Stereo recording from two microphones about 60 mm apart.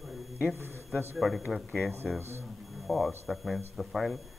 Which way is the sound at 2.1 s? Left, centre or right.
Right.